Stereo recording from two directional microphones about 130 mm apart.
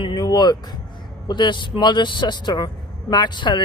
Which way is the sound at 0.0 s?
35° left (ahead or behind).